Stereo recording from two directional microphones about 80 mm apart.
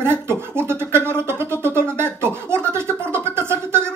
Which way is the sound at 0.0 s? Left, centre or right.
Right.